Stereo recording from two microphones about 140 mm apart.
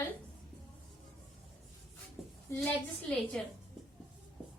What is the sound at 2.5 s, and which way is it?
Speech, 5° left (ahead or behind).